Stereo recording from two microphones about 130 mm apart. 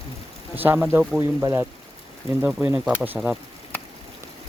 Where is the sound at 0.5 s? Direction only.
15° right (ahead or behind).